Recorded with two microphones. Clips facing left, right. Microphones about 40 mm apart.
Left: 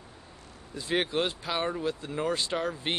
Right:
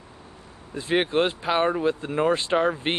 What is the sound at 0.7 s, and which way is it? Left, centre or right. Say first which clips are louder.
Speech: right 6 dB; right.